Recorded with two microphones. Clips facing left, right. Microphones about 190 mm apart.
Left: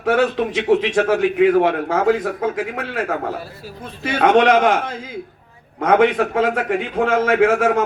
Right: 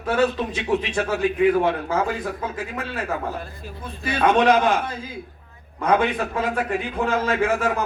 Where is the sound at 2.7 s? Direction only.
70° left (ahead or behind).